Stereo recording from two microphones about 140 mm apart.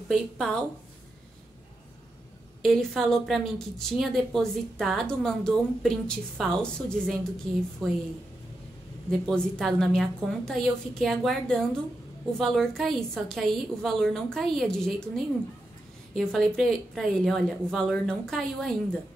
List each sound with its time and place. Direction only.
0.1 s a woman's voice: centre (ahead or behind)
2.6 s a woman's voice: centre (ahead or behind)
9.1 s a woman's voice: 5° left (ahead or behind)
16.2 s a woman's voice: centre (ahead or behind)